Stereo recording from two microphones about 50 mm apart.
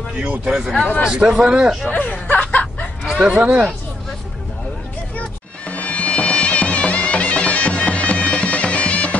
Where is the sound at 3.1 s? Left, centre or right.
Centre.